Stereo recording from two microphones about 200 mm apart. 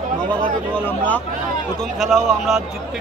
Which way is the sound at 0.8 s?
10° left (ahead or behind).